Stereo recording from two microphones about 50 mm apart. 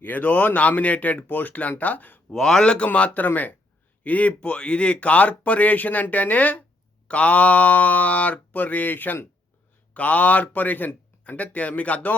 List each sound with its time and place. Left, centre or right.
0.0 s speech: left
2.3 s speech: centre
2.6 s speech: left